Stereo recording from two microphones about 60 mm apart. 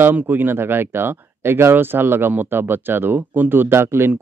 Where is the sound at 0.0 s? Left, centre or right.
Right.